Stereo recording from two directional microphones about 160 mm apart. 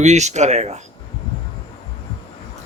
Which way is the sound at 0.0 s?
45° right (ahead or behind).